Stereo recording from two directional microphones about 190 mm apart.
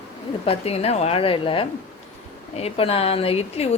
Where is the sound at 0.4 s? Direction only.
30° left (ahead or behind).